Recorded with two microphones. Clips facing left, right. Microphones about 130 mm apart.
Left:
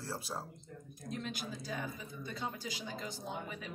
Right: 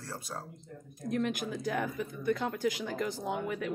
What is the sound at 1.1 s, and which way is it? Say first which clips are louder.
Speech: right 9 dB; 65° right (ahead or behind).